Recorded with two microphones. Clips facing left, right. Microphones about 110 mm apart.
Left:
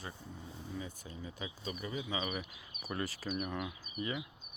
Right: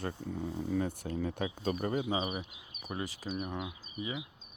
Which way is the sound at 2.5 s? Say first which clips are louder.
Right 1 dB; 15° right (ahead or behind).